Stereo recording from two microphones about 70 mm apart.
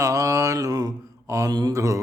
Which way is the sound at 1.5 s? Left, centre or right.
Right.